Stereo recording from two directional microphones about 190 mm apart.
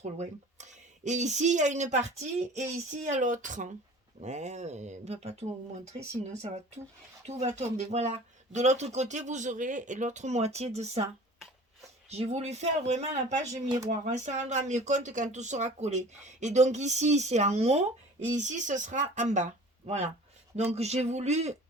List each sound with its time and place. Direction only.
0.0 s speech: 35° right (ahead or behind)
7.3 s speech: 35° right (ahead or behind)
12.0 s speech: 35° right (ahead or behind)
13.7 s speech: 20° right (ahead or behind)
13.9 s speech: 40° right (ahead or behind)
20.6 s speech: 35° right (ahead or behind)